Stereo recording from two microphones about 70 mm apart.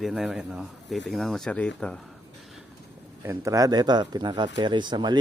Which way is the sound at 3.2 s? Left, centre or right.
Right.